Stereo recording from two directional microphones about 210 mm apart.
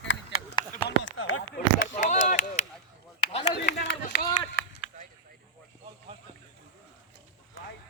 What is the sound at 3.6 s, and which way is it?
Run, 55° left (ahead or behind).